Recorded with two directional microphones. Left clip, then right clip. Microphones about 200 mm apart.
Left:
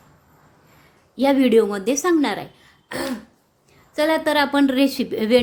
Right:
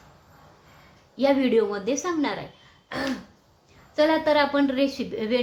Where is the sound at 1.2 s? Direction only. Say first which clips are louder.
Left 5 dB; 50° left (ahead or behind).